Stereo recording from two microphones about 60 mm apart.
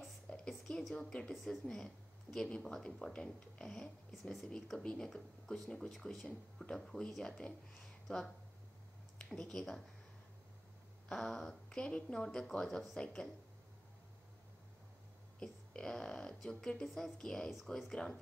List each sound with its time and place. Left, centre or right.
0.3 s a sound: centre
0.9 s speech: centre
1.3 s speech: centre
6.2 s speech: centre
6.8 s speech: centre
11.1 s speech: centre
12.6 s speech: centre
12.9 s speech: centre
15.3 s speech: centre